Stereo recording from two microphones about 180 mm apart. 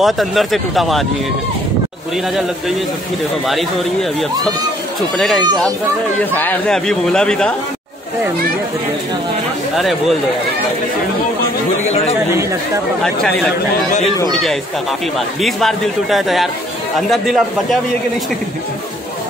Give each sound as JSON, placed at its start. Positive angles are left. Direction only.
{"t": 0.0, "sound": "speech", "side_deg": 0}
{"t": 5.1, "sound": "speech", "side_deg": 0}
{"t": 11.8, "sound": "speech", "side_deg": 35}
{"t": 13.0, "sound": "speech", "side_deg": 5}